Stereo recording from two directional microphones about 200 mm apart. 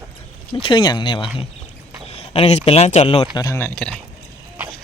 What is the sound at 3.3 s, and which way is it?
Speech, 15° left (ahead or behind).